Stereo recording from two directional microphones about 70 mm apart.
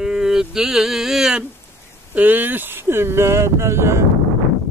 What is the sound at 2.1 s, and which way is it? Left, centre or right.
Speech, right.